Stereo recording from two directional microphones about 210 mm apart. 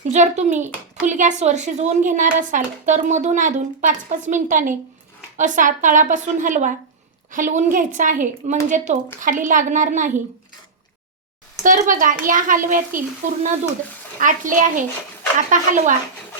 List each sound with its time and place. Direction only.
0.0 s a child's voice: 35° right (ahead or behind)
11.6 s a child's voice: 35° right (ahead or behind)
14.2 s a child's voice: 40° right (ahead or behind)